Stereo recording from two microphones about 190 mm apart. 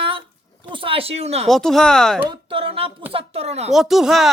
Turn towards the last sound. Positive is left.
turn(degrees=0)  # may be behind; listen again after turning